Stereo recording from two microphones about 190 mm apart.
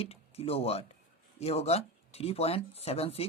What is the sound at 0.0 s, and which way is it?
Speech, 30° left (ahead or behind).